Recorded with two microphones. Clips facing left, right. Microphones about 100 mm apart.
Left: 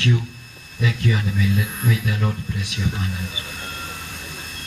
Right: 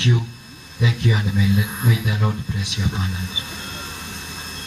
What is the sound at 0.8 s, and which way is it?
Speech, 20° right (ahead or behind).